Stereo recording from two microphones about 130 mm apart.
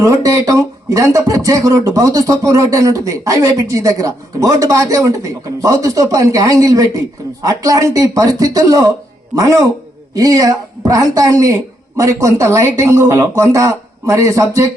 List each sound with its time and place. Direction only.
0.0 s speech: 25° right (ahead or behind)